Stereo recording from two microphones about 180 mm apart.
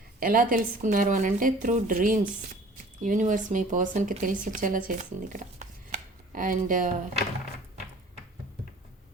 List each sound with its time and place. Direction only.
0.2 s a woman's voice: 50° right (ahead or behind)